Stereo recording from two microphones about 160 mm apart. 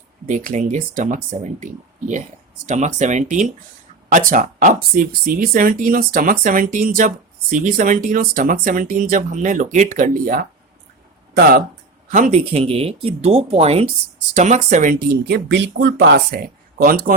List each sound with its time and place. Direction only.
0.3 s speech: 50° right (ahead or behind); by 11.6 s 65° right (ahead or behind)
12.1 s speech: 50° right (ahead or behind); by 17.2 s 65° right (ahead or behind)